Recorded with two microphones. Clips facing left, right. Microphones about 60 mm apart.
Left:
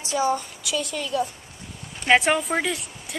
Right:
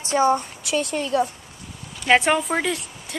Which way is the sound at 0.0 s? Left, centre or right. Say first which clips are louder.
Right 4 dB; right.